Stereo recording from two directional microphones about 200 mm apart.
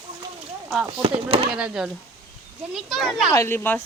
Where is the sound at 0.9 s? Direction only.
25° right (ahead or behind).